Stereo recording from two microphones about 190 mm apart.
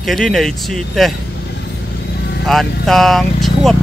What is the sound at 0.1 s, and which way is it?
Speech, centre (ahead or behind).